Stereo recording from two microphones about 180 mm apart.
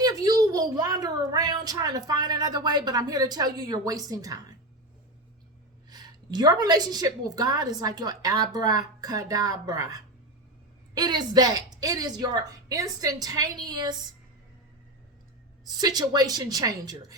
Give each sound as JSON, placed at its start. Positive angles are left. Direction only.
{"t": 0.0, "sound": "a woman's voice", "side_deg": -20}
{"t": 5.9, "sound": "a woman's voice", "side_deg": -20}
{"t": 15.8, "sound": "a woman's voice", "side_deg": -20}